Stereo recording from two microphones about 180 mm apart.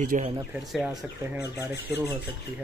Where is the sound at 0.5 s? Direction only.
Centre (ahead or behind).